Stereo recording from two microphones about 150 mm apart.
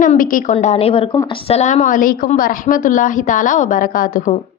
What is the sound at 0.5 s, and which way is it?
A woman's voice, 45° left (ahead or behind).